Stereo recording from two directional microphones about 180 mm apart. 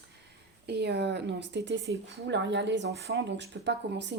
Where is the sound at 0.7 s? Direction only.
65° right (ahead or behind).